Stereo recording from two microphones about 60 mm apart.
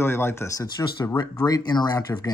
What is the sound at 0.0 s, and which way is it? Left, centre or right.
Speech, left.